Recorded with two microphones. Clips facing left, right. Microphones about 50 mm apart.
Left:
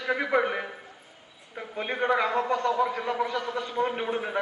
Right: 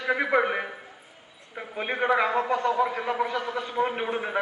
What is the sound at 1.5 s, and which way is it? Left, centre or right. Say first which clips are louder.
A man's voice: right 1 dB; centre.